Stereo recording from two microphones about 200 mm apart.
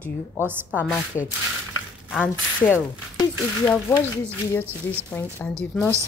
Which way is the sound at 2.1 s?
Centre (ahead or behind).